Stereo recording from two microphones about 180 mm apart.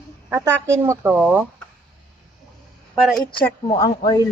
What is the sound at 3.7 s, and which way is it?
Speech, 20° left (ahead or behind).